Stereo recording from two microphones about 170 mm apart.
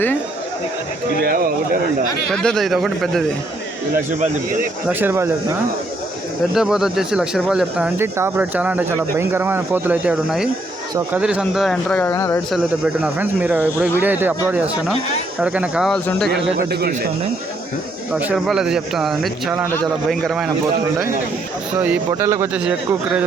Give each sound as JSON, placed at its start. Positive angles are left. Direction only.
{"t": 1.2, "sound": "speech", "side_deg": -60}
{"t": 2.3, "sound": "speech", "side_deg": 5}
{"t": 4.9, "sound": "speech", "side_deg": -10}
{"t": 6.5, "sound": "speech", "side_deg": -5}
{"t": 12.5, "sound": "speech", "side_deg": -5}
{"t": 15.9, "sound": "speech", "side_deg": 5}
{"t": 16.6, "sound": "speech", "side_deg": -65}
{"t": 18.1, "sound": "speech", "side_deg": -10}
{"t": 21.8, "sound": "speech", "side_deg": -15}